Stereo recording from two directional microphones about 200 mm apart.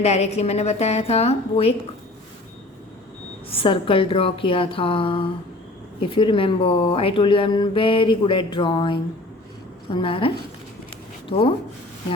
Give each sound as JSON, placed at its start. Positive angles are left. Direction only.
{"t": 0.0, "sound": "a woman's voice", "side_deg": 35}
{"t": 3.5, "sound": "speech", "side_deg": 25}